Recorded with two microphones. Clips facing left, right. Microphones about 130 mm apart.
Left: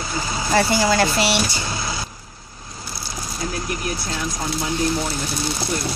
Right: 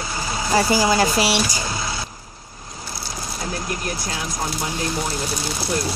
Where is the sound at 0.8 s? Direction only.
10° right (ahead or behind).